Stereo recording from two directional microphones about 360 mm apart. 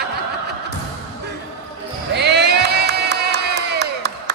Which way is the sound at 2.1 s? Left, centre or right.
Right.